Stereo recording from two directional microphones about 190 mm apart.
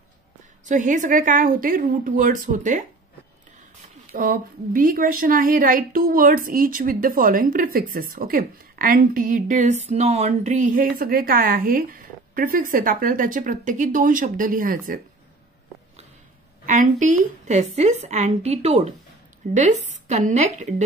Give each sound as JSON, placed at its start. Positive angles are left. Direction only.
{"t": 0.7, "sound": "a woman's voice", "side_deg": -40}
{"t": 4.1, "sound": "a woman's voice", "side_deg": -50}
{"t": 16.6, "sound": "a woman's voice", "side_deg": -40}